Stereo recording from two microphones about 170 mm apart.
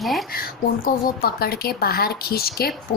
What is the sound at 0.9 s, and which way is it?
Speech, 60° left (ahead or behind).